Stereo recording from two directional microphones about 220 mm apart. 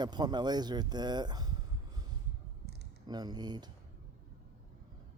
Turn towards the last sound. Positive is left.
turn(degrees=-20)  # may be behind; listen again after turning